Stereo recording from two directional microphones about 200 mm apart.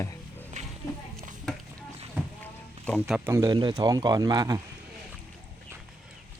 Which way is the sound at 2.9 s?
Centre (ahead or behind).